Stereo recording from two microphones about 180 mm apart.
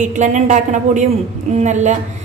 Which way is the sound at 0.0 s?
45° right (ahead or behind).